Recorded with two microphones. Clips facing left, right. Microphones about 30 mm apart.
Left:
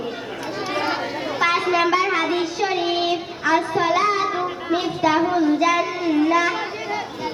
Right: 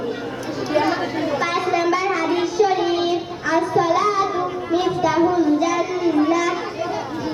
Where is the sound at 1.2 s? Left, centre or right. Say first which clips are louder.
Left 3 dB; left.